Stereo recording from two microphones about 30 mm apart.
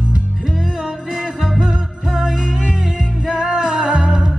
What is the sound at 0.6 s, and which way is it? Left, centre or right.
Music, centre.